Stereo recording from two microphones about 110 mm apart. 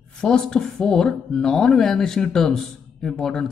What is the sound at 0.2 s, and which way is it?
Speech, 5° left (ahead or behind).